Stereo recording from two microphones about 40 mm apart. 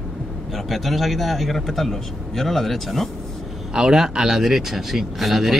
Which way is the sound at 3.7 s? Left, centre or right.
Centre.